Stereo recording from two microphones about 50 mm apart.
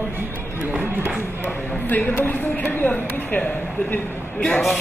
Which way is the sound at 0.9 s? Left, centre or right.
Right.